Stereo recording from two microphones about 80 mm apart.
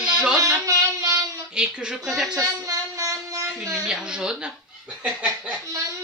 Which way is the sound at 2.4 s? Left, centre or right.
Right.